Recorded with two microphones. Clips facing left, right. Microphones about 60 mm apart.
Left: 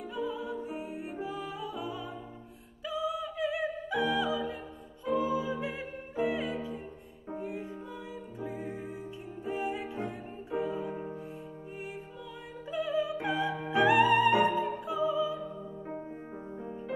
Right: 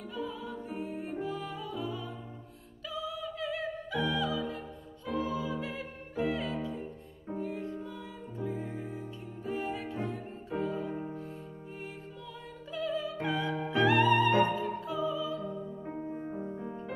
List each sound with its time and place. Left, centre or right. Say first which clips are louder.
0.1 s music: left 3 dB; centre
12.7 s opera: left 3 dB; centre
13.3 s music: left 1 dB; centre